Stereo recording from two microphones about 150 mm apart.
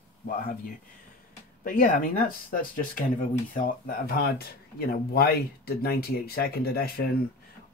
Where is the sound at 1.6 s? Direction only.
65° left (ahead or behind); by 7.1 s 90° left.